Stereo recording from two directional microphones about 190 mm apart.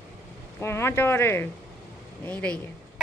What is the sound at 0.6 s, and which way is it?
Speech, 15° left (ahead or behind).